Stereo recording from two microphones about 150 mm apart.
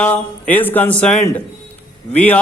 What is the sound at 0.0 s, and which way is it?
A man's voice, 10° left (ahead or behind).